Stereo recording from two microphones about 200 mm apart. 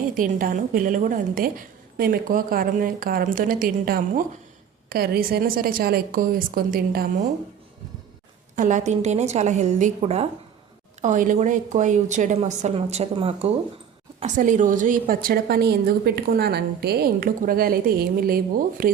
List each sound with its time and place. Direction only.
0.1 s a woman's voice: 45° right (ahead or behind)
8.5 s a woman's voice: 40° right (ahead or behind)